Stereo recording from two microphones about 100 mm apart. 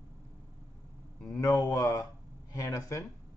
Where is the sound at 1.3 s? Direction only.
35° left (ahead or behind).